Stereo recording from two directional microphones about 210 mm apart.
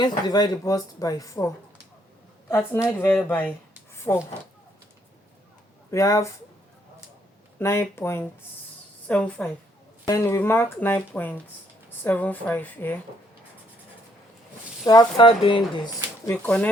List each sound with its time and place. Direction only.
0.2 s speech: 20° left (ahead or behind)
4.1 s speech: 25° left (ahead or behind)
5.9 s speech: 15° left (ahead or behind)
7.6 s a woman's voice: 10° left (ahead or behind)
14.8 s speech: 20° left (ahead or behind)
16.2 s speech: 10° left (ahead or behind)